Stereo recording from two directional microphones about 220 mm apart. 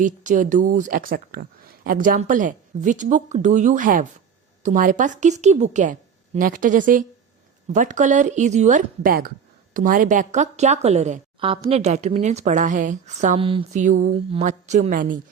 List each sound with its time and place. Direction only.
0.0 s a woman's voice: 35° right (ahead or behind)